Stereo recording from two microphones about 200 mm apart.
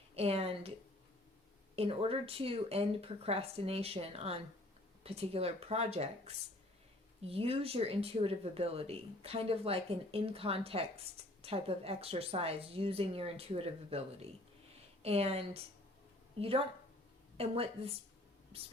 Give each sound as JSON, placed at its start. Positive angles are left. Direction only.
{"t": 0.2, "sound": "speech", "side_deg": -30}
{"t": 1.7, "sound": "speech", "side_deg": -30}